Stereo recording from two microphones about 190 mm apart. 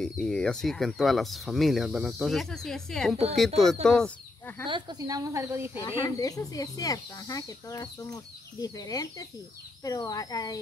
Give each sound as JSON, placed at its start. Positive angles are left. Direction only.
{"t": 0.0, "sound": "speech", "side_deg": 5}
{"t": 4.6, "sound": "speech", "side_deg": -25}
{"t": 5.8, "sound": "speech", "side_deg": 15}